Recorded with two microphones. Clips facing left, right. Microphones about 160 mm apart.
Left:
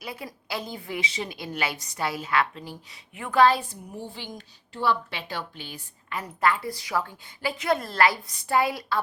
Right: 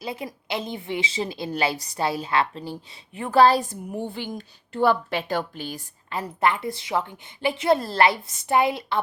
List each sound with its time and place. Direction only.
0.0 s a woman's voice: 25° right (ahead or behind); by 5.8 s 45° right (ahead or behind)
6.1 s a woman's voice: 30° right (ahead or behind)